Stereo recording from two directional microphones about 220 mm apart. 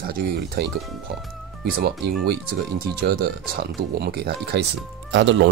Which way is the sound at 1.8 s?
45° right (ahead or behind).